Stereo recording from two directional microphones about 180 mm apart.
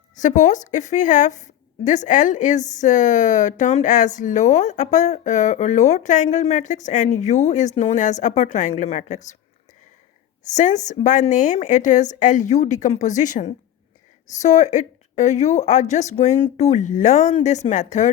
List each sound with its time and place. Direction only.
0.2 s a woman's voice: 45° left (ahead or behind)
10.5 s a woman's voice: 45° left (ahead or behind)